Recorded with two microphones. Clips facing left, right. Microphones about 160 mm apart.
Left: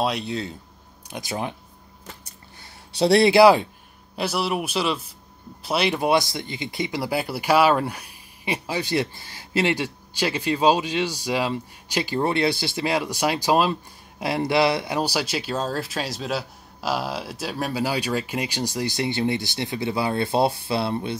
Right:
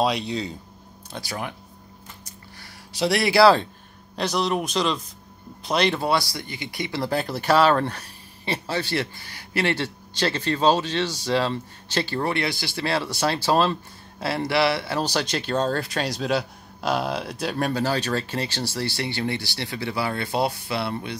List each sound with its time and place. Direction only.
0.0 s speech: centre (ahead or behind)
1.1 s speech: 20° left (ahead or behind)
3.0 s speech: 30° left (ahead or behind); by 6.0 s 5° left (ahead or behind)
6.0 s speech: 20° left (ahead or behind)
7.0 s speech: 10° left (ahead or behind)